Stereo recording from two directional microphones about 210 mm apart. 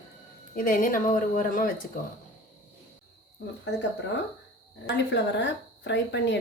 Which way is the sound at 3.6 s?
55° left (ahead or behind).